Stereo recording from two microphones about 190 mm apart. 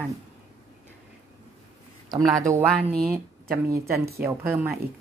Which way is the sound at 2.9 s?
Centre (ahead or behind).